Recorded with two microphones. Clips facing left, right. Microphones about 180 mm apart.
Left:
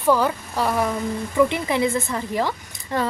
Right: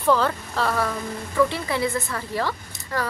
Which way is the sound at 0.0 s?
15° left (ahead or behind).